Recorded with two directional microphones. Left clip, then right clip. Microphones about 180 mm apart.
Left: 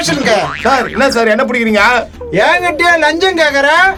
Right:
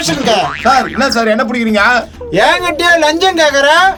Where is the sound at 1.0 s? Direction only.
25° left (ahead or behind).